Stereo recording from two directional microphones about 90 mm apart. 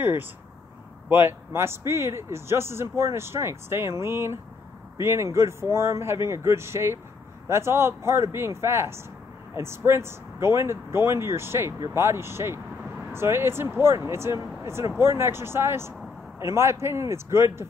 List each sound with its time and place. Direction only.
1.0 s speech: 25° right (ahead or behind)